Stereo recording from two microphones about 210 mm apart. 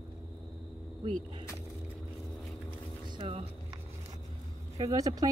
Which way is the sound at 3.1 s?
25° right (ahead or behind).